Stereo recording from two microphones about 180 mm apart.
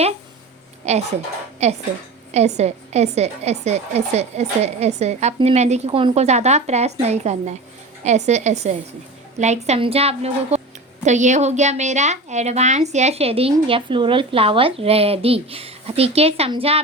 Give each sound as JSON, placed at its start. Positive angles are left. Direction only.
{"t": 0.8, "sound": "a woman's voice", "side_deg": -35}